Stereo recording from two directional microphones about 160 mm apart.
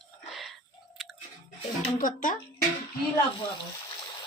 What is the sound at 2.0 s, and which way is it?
Speech, 55° left (ahead or behind).